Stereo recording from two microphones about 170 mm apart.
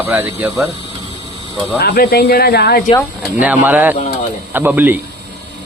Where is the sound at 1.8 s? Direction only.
65° left (ahead or behind).